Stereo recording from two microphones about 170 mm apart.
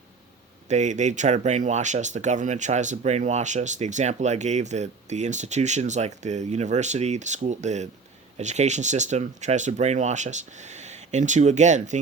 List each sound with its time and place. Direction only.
0.7 s speech: 45° right (ahead or behind)